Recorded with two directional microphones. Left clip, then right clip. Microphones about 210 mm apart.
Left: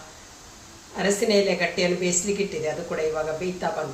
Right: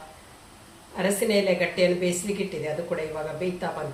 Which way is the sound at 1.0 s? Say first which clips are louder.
Left 2 dB; 5° right (ahead or behind).